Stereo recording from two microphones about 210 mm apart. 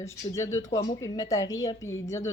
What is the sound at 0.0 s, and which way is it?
A woman's voice, 15° left (ahead or behind).